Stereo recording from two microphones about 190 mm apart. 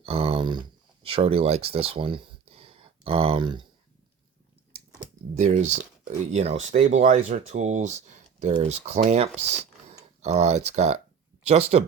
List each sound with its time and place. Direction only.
0.0 s speech: 30° right (ahead or behind)
5.3 s speech: 35° right (ahead or behind)